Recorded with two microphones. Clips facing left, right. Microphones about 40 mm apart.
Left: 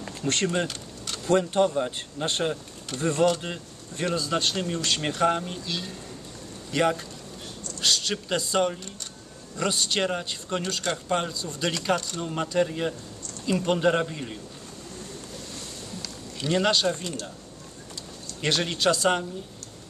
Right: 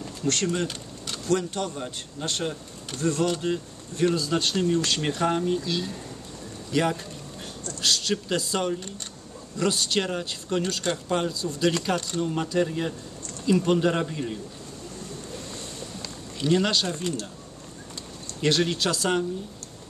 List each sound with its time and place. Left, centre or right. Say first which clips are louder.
0.2 s speech: even; centre
0.7 s a sound: even; centre
1.2 s speech: left 5 dB; left; by 14.4 s centre
16.3 s speech: right 1 dB; centre
18.4 s speech: right 1 dB; centre